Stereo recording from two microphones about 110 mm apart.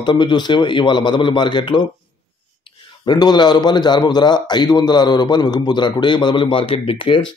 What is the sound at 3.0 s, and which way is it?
A man's voice, 40° left (ahead or behind).